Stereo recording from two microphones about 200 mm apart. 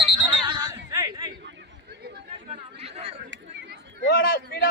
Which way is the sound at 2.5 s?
30° right (ahead or behind).